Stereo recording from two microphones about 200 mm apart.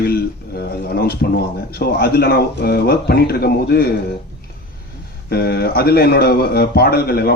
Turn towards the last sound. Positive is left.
turn(degrees=50)  # may be behind; listen again after turning